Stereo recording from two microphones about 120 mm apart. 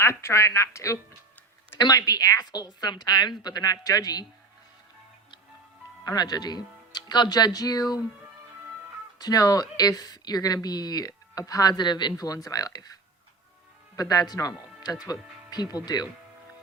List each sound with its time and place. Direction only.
0.0 s speech: 20° left (ahead or behind)
6.1 s speech: 35° left (ahead or behind)
9.1 s speech: 30° left (ahead or behind)
13.9 s speech: 30° left (ahead or behind)